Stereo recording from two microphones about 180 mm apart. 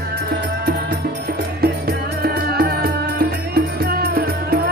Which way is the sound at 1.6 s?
60° right (ahead or behind).